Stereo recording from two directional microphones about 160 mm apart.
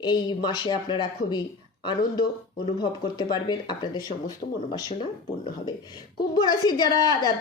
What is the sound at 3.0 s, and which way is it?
A woman's voice, 25° left (ahead or behind).